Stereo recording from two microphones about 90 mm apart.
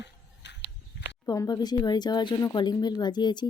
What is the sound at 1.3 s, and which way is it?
A woman's voice, 45° left (ahead or behind).